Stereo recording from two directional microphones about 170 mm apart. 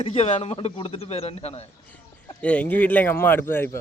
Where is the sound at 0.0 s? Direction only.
40° left (ahead or behind).